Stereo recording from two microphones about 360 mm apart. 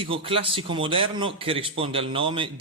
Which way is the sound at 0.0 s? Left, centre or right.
Centre.